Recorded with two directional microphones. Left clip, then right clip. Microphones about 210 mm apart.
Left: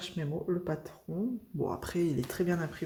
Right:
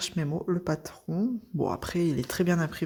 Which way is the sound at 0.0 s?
45° right (ahead or behind).